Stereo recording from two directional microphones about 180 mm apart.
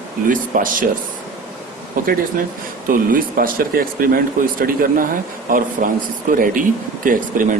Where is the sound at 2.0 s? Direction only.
50° right (ahead or behind).